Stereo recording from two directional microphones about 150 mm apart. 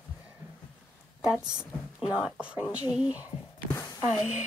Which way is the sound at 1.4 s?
5° right (ahead or behind).